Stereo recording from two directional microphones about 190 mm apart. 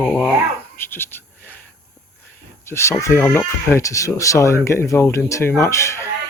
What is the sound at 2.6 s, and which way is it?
Speech, 15° left (ahead or behind).